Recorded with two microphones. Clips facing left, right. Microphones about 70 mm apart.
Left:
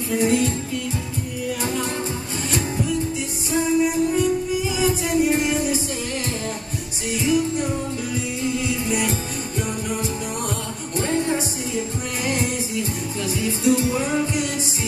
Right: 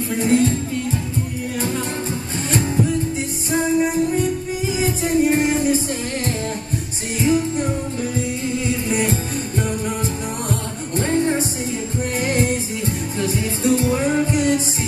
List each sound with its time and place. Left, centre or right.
0.1 s music: right
3.4 s music: right
7.2 s music: right
8.8 s music: right